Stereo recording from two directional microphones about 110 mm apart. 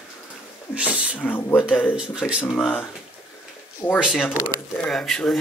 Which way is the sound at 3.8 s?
35° left (ahead or behind).